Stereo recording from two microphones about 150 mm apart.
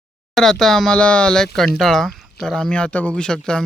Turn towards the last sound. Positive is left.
turn(degrees=5)  # may be behind; listen again after turning